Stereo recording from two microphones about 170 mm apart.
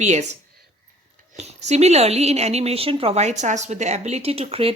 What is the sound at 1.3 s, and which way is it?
A woman's voice, 40° right (ahead or behind).